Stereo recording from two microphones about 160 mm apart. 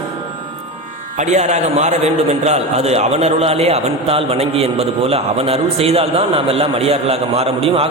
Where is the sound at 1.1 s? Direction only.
45° right (ahead or behind).